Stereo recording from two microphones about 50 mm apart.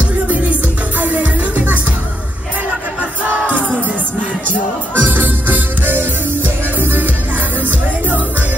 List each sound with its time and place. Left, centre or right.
0.3 s music: right
4.5 s music: right